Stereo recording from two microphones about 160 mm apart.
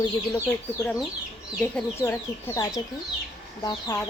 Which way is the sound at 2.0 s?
15° left (ahead or behind).